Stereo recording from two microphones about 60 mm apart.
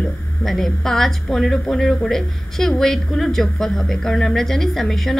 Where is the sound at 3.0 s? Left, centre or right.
Left.